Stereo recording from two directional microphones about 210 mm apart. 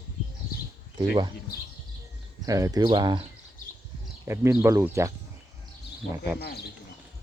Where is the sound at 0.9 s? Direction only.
20° right (ahead or behind).